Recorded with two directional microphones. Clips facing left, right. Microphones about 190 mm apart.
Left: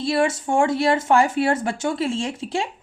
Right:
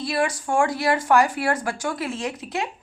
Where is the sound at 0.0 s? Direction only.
25° left (ahead or behind).